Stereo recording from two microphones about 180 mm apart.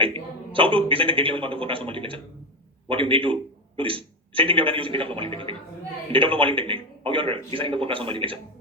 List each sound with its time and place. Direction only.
0.0 s a man's voice: 30° right (ahead or behind)